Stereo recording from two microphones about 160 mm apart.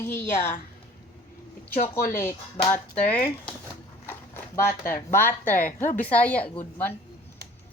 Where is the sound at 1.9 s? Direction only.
15° left (ahead or behind).